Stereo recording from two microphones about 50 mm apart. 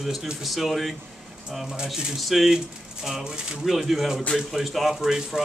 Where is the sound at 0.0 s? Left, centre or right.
Centre.